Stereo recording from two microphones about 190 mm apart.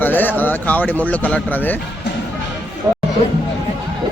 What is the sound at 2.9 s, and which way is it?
Music, 20° right (ahead or behind).